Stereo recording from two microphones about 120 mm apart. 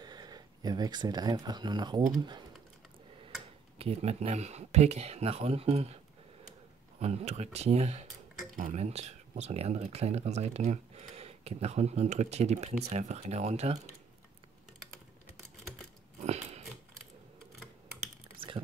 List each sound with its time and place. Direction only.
0.0 s speech: 35° right (ahead or behind)
3.7 s speech: 60° right (ahead or behind)
7.0 s speech: 60° right (ahead or behind)
8.5 s speech: 75° right (ahead or behind)
16.2 s biting: 65° right (ahead or behind)